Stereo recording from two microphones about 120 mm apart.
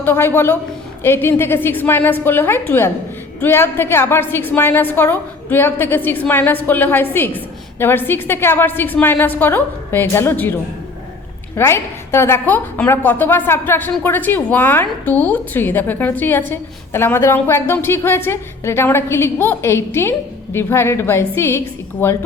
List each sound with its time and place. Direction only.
0.0 s a woman's voice: 15° left (ahead or behind)
11.5 s a woman's voice: 20° left (ahead or behind)